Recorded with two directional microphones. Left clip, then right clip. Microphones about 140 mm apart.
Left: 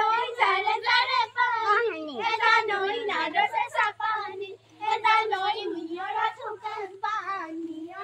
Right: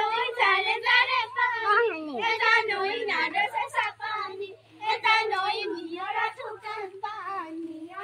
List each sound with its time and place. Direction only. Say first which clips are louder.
0.0 s child singing: left 1 dB; centre (ahead or behind)
1.7 s cat: right 1 dB; 20° right (ahead or behind)
2.1 s a sound: left 1 dB; centre (ahead or behind)
4.8 s child singing: left 1 dB; centre (ahead or behind)